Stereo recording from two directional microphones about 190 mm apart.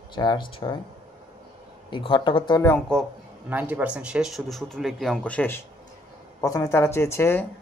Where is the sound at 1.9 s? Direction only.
25° left (ahead or behind).